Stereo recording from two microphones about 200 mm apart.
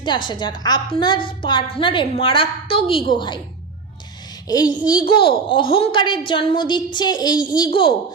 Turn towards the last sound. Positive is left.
turn(degrees=25)  # may be behind; listen again after turning